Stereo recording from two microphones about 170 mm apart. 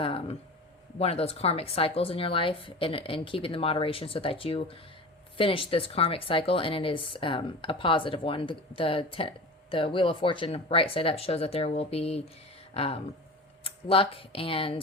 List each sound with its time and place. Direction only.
0.0 s speech: 30° left (ahead or behind)